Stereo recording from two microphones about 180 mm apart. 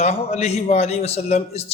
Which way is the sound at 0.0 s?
35° left (ahead or behind).